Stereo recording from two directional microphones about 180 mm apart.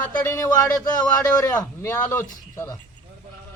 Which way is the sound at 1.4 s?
15° left (ahead or behind).